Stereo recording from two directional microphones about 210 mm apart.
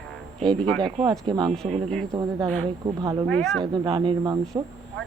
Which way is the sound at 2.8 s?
20° right (ahead or behind).